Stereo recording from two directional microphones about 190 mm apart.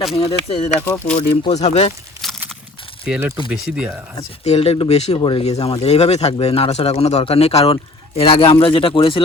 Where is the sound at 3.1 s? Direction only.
5° right (ahead or behind).